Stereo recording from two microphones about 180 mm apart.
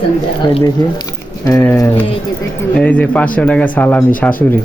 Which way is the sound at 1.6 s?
15° left (ahead or behind).